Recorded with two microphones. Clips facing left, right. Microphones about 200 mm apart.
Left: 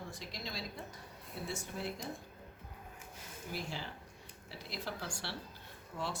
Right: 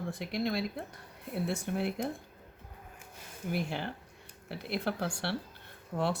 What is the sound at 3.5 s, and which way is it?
Speech, 60° right (ahead or behind).